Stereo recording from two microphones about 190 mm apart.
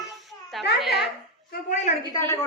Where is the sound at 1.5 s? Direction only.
45° left (ahead or behind).